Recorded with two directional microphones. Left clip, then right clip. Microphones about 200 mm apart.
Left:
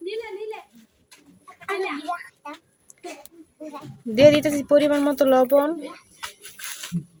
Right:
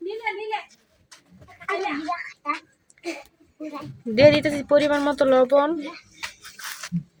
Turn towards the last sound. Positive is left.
turn(degrees=5)  # may be behind; listen again after turning